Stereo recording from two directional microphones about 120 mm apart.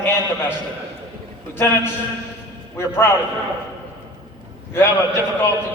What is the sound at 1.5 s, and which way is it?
A man's voice, 20° left (ahead or behind).